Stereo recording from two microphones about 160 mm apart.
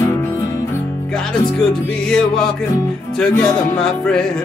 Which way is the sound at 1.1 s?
5° left (ahead or behind).